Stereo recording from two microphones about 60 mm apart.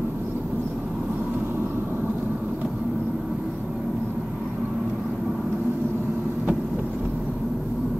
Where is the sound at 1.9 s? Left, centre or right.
Right.